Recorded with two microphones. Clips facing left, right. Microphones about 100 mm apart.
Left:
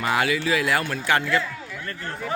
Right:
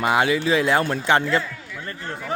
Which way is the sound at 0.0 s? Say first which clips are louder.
Right 3 dB; 20° right (ahead or behind).